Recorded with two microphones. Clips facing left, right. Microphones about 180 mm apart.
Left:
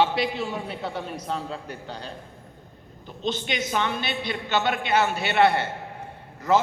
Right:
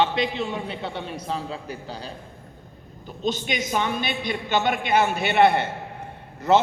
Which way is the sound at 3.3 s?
10° right (ahead or behind).